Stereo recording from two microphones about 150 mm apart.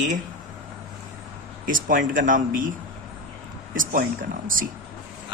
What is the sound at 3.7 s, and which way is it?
Speech, 65° right (ahead or behind).